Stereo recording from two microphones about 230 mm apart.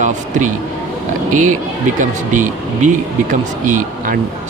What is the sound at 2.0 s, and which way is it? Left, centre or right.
Speech, right.